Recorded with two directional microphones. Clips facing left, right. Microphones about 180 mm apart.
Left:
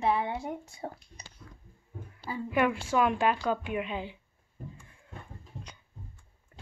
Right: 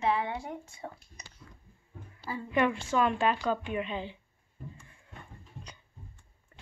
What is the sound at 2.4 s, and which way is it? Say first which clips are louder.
A woman's voice: even; 10° left (ahead or behind).